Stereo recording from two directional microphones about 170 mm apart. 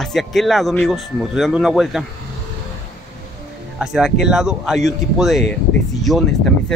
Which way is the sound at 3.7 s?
Centre (ahead or behind).